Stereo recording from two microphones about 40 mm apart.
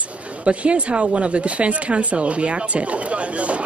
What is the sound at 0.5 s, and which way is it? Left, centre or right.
Speech, right.